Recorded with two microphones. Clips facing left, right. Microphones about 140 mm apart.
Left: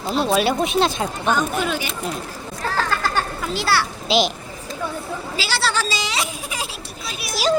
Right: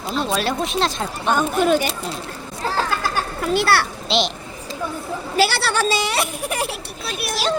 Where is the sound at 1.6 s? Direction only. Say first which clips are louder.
Right 7 dB; 45° right (ahead or behind).